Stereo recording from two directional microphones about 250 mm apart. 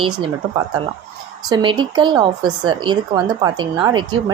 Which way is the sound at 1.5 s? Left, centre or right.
Centre.